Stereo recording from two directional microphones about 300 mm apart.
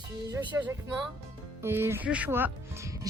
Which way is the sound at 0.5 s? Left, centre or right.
Centre.